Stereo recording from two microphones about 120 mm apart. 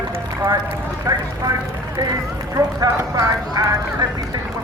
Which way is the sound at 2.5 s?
30° right (ahead or behind).